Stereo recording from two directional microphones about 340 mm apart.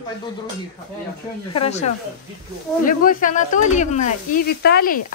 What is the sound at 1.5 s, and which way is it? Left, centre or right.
Speech, centre.